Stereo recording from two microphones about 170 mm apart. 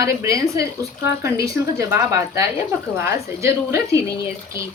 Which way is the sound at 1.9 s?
15° right (ahead or behind).